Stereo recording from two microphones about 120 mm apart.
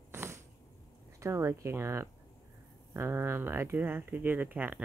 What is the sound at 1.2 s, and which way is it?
Speech, 25° right (ahead or behind).